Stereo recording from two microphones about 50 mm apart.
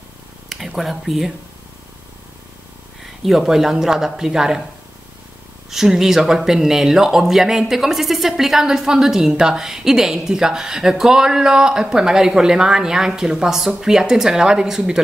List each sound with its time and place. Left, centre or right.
0.5 s speech: centre
3.3 s speech: centre
5.7 s speech: centre